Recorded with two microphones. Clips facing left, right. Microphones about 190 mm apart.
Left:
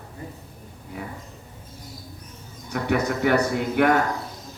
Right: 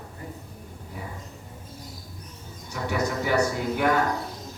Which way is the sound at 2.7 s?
60° left (ahead or behind).